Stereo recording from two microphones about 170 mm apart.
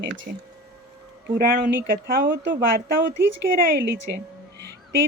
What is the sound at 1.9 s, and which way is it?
Speech, 60° right (ahead or behind).